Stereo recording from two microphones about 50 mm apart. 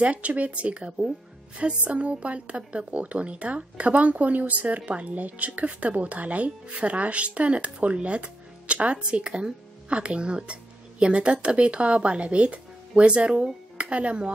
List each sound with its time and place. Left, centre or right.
0.0 s a woman's voice: right